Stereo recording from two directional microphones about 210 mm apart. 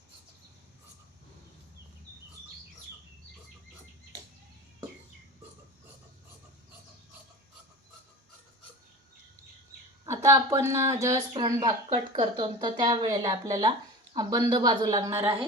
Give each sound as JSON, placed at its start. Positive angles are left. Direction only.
{"t": 10.1, "sound": "speech", "side_deg": -15}